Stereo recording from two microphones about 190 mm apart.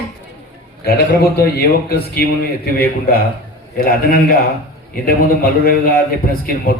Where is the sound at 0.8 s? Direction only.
55° left (ahead or behind).